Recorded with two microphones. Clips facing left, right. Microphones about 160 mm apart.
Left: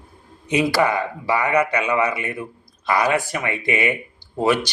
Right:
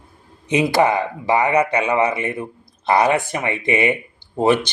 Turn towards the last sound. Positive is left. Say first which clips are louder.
# right 3 dB
turn(degrees=-25)  # may be behind; listen again after turning